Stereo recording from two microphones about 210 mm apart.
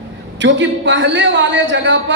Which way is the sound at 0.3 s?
60° right (ahead or behind).